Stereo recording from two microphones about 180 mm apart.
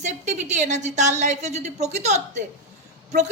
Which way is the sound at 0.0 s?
40° right (ahead or behind).